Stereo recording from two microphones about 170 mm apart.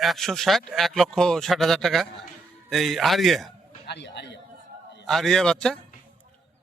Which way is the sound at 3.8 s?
90° left.